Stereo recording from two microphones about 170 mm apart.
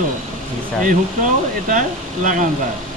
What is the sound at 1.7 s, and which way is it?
Speech, 50° right (ahead or behind).